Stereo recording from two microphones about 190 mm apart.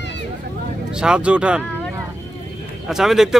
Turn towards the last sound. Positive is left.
turn(degrees=0)  # may be behind; listen again after turning